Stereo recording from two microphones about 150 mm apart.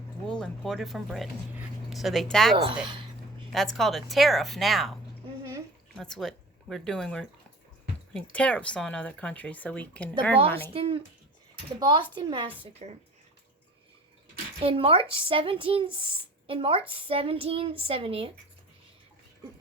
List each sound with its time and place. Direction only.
0.3 s speech: 5° left (ahead or behind)
2.8 s speech: 35° right (ahead or behind)
3.5 s speech: centre (ahead or behind)
5.4 s drip: 25° right (ahead or behind)
6.0 s speech: centre (ahead or behind)
10.7 s speech: 35° right (ahead or behind)
12.8 s speech: 45° right (ahead or behind)
14.6 s speech: 40° right (ahead or behind)